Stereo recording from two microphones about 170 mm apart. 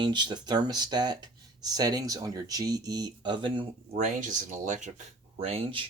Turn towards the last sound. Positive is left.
turn(degrees=-35)  # may be behind; listen again after turning